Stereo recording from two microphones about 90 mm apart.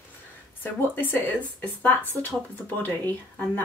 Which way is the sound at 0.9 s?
25° left (ahead or behind).